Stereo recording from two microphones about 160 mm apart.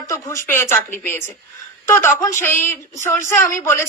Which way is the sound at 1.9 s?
15° left (ahead or behind).